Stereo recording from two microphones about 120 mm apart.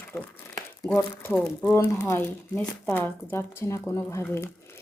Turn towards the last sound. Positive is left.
turn(degrees=20)  # may be behind; listen again after turning